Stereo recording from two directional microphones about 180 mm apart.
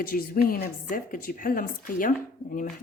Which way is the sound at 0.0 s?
50° left (ahead or behind).